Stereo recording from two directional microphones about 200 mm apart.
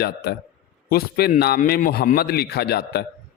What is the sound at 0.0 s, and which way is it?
A man's voice, 55° left (ahead or behind).